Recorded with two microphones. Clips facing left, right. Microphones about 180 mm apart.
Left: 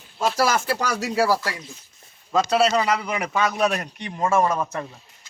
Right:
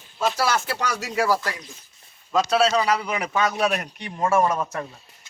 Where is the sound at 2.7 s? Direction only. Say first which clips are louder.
Even; 5° left (ahead or behind).